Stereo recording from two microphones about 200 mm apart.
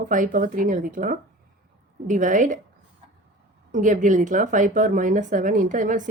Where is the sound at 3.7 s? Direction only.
40° right (ahead or behind).